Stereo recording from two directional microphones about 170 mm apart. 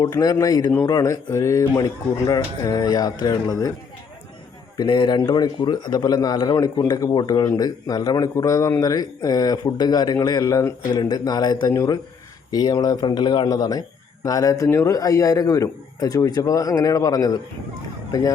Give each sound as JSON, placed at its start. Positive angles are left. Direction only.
{"t": 0.0, "sound": "a man's voice", "side_deg": 20}
{"t": 4.8, "sound": "a man's voice", "side_deg": 25}